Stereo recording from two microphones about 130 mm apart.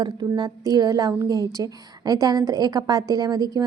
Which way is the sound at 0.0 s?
35° right (ahead or behind).